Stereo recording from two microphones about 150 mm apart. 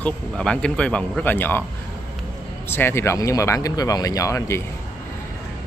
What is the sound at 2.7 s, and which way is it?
Speech, 15° left (ahead or behind).